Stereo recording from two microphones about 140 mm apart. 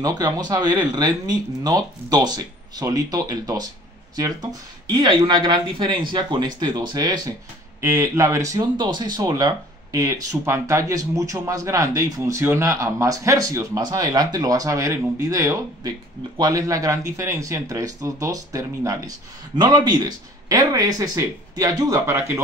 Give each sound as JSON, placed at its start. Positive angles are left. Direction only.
{"t": 0.0, "sound": "speech", "side_deg": -25}
{"t": 5.2, "sound": "speech", "side_deg": -35}
{"t": 8.7, "sound": "speech", "side_deg": -30}